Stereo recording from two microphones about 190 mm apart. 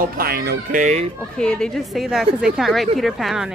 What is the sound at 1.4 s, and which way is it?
A woman's voice, 5° left (ahead or behind).